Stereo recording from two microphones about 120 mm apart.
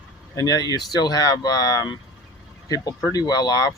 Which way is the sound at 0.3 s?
35° left (ahead or behind).